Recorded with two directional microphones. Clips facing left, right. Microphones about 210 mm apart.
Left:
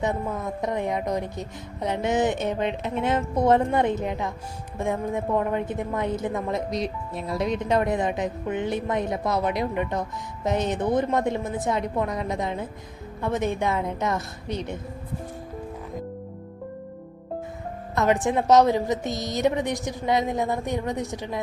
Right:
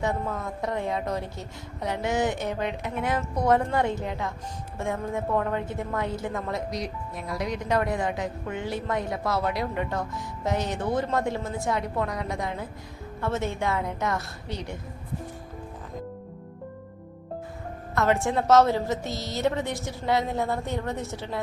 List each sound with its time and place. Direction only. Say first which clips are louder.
0.0 s a woman's voice: left 2 dB; 20° left (ahead or behind)
17.9 s a woman's voice: left 2 dB; 15° left (ahead or behind)